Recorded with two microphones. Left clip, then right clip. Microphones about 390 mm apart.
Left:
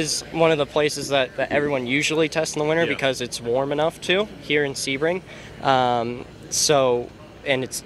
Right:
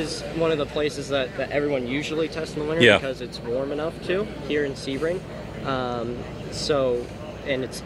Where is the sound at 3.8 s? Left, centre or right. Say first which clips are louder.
Left 5 dB; left.